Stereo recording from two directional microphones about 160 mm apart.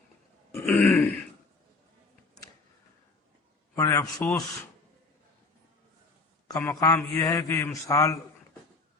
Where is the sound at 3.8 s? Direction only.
20° left (ahead or behind).